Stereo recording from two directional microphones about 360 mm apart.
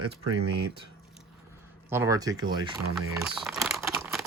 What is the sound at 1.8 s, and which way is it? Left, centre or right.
Speech, centre.